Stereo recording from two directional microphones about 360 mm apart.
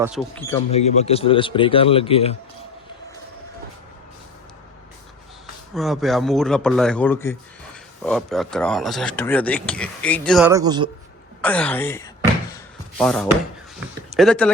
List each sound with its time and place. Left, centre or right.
0.0 s speech: centre
0.7 s speech: centre
5.7 s speech: centre
11.4 s a sound: centre
14.2 s speech: centre